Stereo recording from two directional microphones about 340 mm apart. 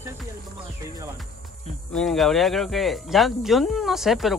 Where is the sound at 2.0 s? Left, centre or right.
Centre.